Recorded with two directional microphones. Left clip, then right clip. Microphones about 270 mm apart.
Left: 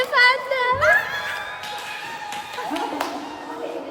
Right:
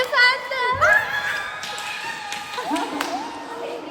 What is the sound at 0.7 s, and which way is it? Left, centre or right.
Children shouting, centre.